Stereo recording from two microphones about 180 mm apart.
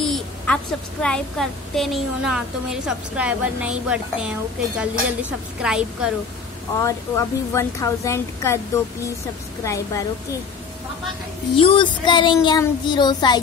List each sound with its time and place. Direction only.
0.0 s a sound: centre (ahead or behind)
1.0 s a woman's voice: 5° left (ahead or behind)
6.8 s a woman's voice: 15° left (ahead or behind)
9.7 s a woman's voice: 15° left (ahead or behind)
11.5 s child singing: 30° left (ahead or behind)